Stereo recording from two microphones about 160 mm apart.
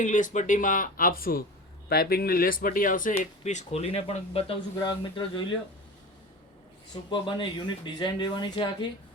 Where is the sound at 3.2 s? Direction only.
45° left (ahead or behind); by 5.4 s 30° left (ahead or behind).